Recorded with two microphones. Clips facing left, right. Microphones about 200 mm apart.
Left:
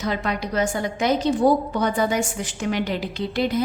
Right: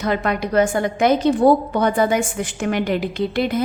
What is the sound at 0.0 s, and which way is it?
A woman's voice, 55° right (ahead or behind).